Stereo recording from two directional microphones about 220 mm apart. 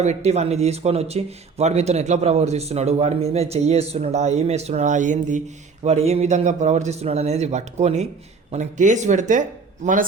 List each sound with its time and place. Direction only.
0.0 s speech: 30° right (ahead or behind)